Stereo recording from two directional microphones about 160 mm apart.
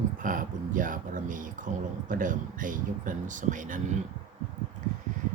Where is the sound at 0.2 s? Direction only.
55° right (ahead or behind).